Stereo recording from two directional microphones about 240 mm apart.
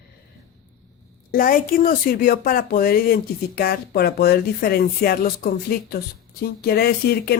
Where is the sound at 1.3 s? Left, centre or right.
Left.